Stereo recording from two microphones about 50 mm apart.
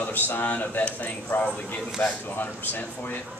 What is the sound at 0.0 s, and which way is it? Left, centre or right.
Speech, left.